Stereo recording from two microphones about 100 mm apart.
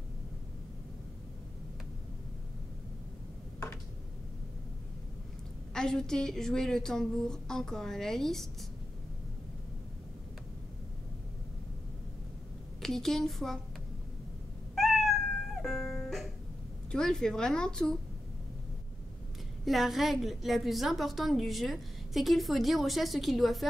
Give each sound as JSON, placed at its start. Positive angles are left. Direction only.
{"t": 3.5, "sound": "tick", "side_deg": 25}
{"t": 5.7, "sound": "a woman's voice", "side_deg": 5}
{"t": 12.8, "sound": "a woman's voice", "side_deg": 5}
{"t": 14.8, "sound": "music", "side_deg": 0}
{"t": 16.9, "sound": "speech", "side_deg": 5}
{"t": 19.6, "sound": "a woman's voice", "side_deg": 0}